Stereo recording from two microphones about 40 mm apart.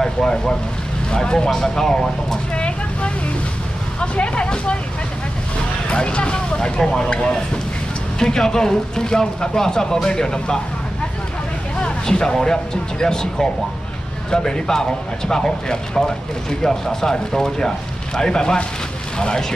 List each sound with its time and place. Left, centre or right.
0.0 s speech: centre
2.5 s vehicle: left
4.0 s speech: left
5.9 s speech: left
11.8 s speech: centre